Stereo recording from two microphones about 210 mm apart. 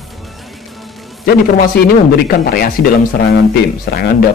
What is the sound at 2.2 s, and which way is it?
Speech, 45° left (ahead or behind).